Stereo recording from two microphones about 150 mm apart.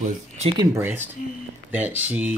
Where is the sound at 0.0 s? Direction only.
45° right (ahead or behind).